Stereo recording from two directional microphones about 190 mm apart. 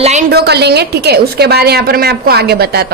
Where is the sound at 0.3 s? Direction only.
60° right (ahead or behind).